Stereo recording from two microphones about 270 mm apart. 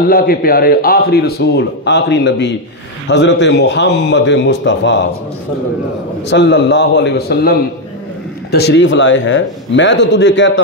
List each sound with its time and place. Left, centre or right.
0.1 s a man's voice: left
6.2 s a man's voice: left